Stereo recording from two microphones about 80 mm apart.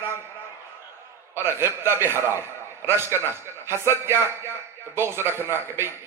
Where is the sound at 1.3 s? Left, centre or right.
Right.